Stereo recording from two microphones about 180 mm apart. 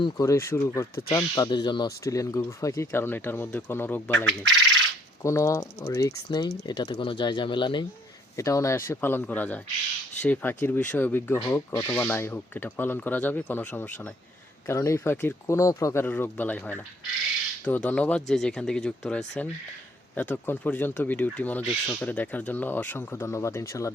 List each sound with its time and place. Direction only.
0.0 s speech: 15° left (ahead or behind)